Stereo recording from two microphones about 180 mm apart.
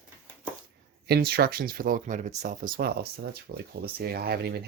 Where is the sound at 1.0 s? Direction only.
60° right (ahead or behind).